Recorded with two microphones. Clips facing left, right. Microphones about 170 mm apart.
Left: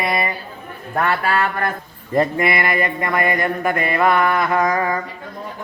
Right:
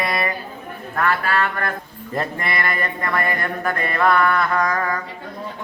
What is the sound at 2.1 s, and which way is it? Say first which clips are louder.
Mantra: left 7 dB; 5° left (ahead or behind).